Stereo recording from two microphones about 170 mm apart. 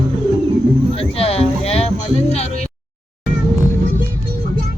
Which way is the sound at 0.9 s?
35° left (ahead or behind).